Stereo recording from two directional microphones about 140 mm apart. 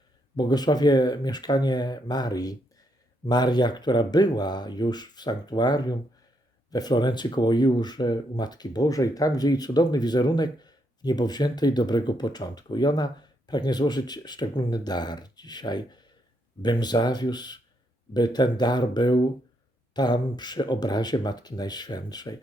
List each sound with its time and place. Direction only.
0.3 s speech: 30° left (ahead or behind)